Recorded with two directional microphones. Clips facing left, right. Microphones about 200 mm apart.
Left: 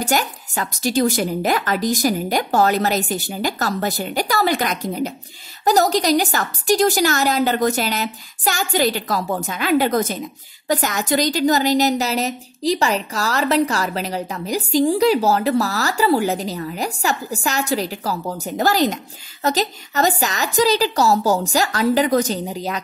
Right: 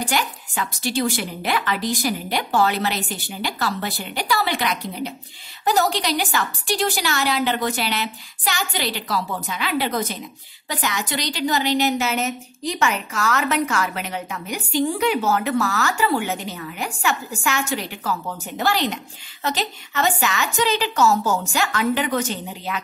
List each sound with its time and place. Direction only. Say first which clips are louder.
0.0 s a woman's voice: left 3 dB; 45° left (ahead or behind)